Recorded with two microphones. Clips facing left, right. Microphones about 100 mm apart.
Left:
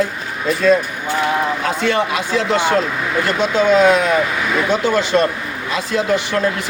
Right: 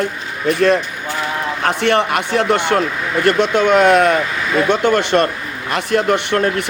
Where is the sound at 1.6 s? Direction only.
60° right (ahead or behind).